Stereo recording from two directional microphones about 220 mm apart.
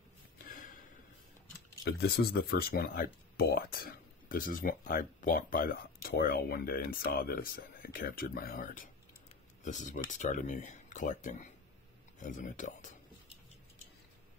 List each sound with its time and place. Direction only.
1.9 s speech: 45° left (ahead or behind)